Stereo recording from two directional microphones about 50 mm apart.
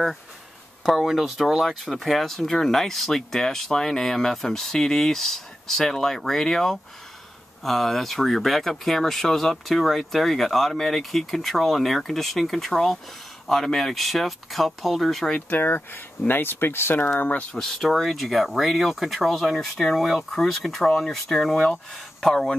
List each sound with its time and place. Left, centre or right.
0.8 s speech: centre
15.5 s speech: left
17.6 s speech: centre